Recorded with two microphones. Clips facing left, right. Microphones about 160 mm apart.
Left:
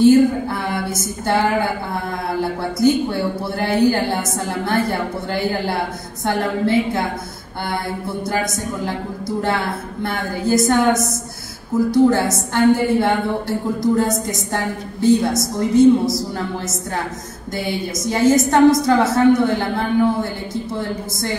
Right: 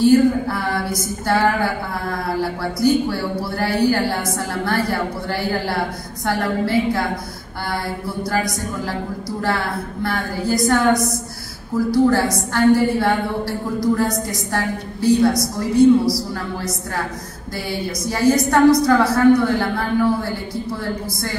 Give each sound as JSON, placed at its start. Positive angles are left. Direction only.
{"t": 0.0, "sound": "speech", "side_deg": 20}
{"t": 8.2, "sound": "speech", "side_deg": 20}